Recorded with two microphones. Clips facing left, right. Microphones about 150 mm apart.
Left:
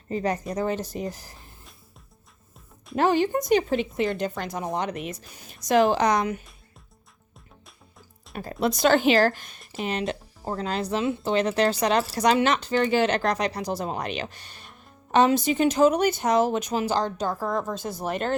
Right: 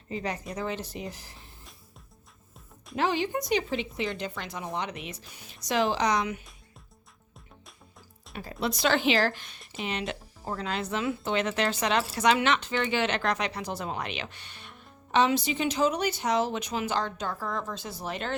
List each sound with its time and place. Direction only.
0.1 s speech: 45° left (ahead or behind)
2.9 s speech: 45° left (ahead or behind)
8.6 s speech: 45° left (ahead or behind)